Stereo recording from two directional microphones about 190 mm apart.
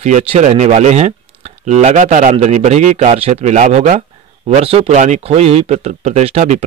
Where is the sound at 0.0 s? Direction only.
35° right (ahead or behind).